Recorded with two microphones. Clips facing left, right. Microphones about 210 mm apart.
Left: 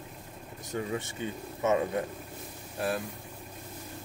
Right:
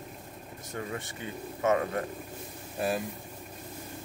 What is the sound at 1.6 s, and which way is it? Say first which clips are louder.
Speech: even; 20° left (ahead or behind).